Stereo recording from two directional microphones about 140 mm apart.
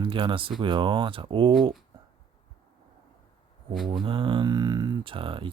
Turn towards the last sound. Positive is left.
turn(degrees=-40)  # may be behind; listen again after turning